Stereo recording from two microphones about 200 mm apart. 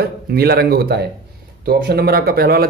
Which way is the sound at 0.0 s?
50° right (ahead or behind).